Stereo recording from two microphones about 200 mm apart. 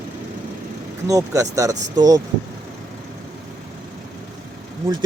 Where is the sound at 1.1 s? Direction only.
15° right (ahead or behind).